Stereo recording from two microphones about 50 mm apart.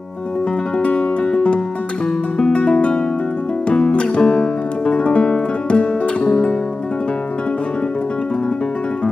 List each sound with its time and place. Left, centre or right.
0.8 s music: left